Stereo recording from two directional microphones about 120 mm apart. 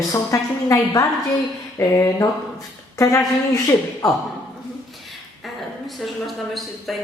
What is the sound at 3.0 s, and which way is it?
Speech, 25° left (ahead or behind).